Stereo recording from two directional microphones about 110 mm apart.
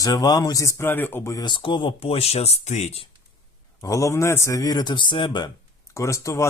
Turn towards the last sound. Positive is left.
turn(degrees=30)  # may be behind; listen again after turning